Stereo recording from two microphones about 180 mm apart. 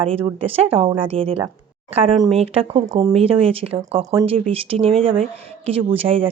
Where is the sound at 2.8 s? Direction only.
20° right (ahead or behind).